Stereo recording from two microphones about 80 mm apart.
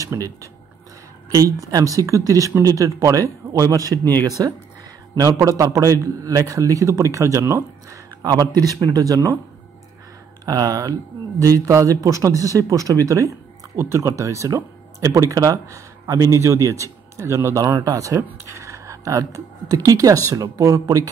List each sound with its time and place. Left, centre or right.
0.0 s speech: right
10.4 s speech: right
17.6 s speech: right